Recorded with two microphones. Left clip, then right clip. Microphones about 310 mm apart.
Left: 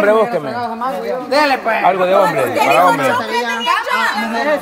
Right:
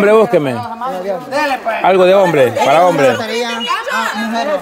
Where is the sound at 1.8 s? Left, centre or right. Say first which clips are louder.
Right 5 dB; right.